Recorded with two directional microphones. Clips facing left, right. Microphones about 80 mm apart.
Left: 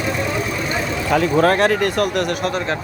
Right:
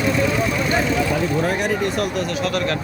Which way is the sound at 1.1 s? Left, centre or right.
Left.